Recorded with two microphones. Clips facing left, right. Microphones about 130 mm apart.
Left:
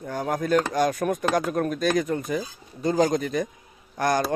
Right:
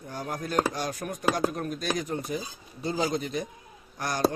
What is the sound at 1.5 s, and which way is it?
Speech, 85° left.